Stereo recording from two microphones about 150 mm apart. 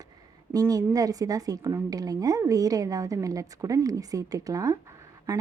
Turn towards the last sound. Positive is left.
turn(degrees=-20)  # may be behind; listen again after turning